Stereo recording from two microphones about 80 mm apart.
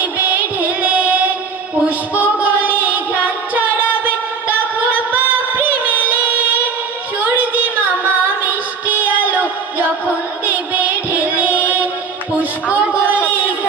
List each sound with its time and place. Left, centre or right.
0.0 s music: right
5.1 s music: right
9.0 s music: right
11.3 s music: right